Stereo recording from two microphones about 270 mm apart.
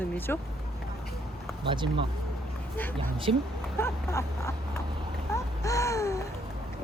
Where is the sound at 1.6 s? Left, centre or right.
Centre.